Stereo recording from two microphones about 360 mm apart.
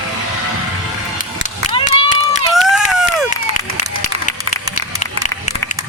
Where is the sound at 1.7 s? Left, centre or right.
Centre.